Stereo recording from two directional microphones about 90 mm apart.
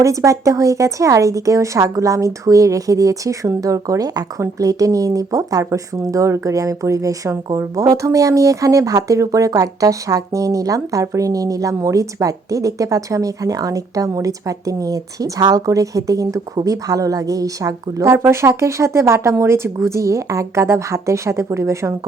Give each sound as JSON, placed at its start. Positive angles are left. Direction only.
{"t": 0.0, "sound": "speech", "side_deg": -35}